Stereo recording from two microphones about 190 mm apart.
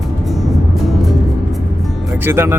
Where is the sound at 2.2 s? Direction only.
10° right (ahead or behind).